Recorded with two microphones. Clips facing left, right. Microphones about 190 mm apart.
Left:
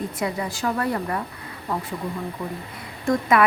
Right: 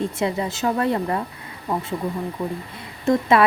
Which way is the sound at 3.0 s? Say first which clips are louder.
Right 2 dB; 25° right (ahead or behind).